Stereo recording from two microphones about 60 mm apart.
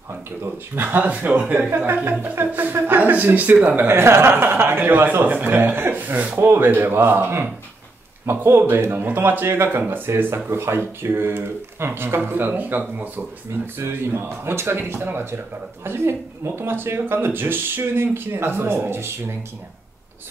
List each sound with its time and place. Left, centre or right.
0.4 s speech: right
12.3 s speech: right
13.5 s speech: right